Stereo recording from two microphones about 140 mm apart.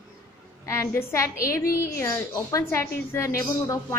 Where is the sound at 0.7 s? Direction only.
20° left (ahead or behind).